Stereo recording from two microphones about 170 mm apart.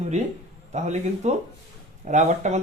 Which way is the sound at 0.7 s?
40° right (ahead or behind).